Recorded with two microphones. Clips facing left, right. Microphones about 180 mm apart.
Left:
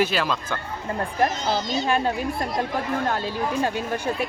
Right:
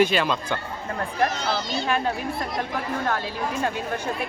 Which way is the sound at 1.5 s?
45° left (ahead or behind).